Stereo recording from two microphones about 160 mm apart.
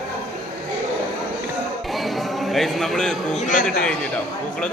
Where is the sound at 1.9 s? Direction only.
Centre (ahead or behind).